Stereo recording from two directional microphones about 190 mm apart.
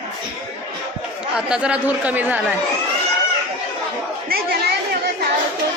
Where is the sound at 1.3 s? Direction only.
5° right (ahead or behind).